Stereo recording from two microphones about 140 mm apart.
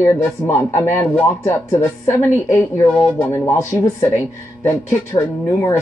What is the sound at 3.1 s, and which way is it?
Speech, 20° left (ahead or behind).